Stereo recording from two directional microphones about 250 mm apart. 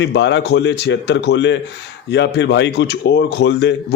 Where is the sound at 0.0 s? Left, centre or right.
Left.